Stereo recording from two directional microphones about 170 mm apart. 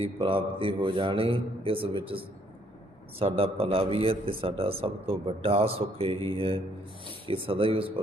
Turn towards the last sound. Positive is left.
turn(degrees=-30)  # may be behind; listen again after turning